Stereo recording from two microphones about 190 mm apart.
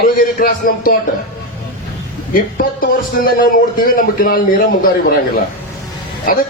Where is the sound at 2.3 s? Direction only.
50° left (ahead or behind).